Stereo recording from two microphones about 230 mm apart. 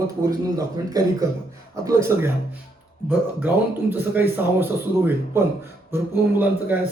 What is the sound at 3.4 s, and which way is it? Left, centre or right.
Speech, centre.